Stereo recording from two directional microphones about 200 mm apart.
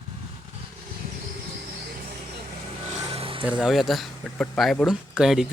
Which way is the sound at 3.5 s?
5° right (ahead or behind).